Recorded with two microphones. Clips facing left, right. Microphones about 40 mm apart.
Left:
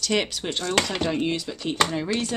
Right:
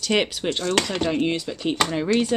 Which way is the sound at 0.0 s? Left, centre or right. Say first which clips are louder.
Right 3 dB; centre.